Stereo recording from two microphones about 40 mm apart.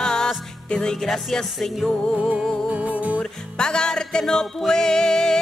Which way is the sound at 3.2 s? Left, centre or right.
Centre.